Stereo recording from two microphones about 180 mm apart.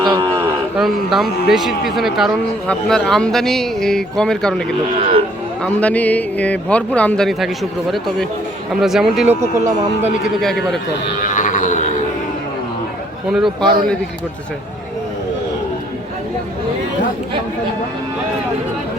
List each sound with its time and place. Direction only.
0.0 s cattle: 20° right (ahead or behind)
0.8 s a man's voice: centre (ahead or behind)
4.9 s speech: 40° right (ahead or behind)
5.6 s a man's voice: 10° left (ahead or behind)
9.4 s speech: 40° right (ahead or behind)
10.4 s a man's voice: centre (ahead or behind)
11.3 s livestock: 45° left (ahead or behind)
13.3 s a man's voice: centre (ahead or behind)